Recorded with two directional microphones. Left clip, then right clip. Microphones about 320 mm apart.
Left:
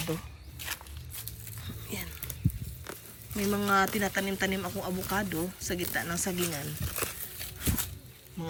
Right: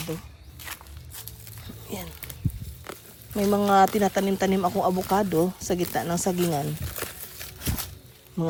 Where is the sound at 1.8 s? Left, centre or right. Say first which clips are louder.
Right 4 dB; centre.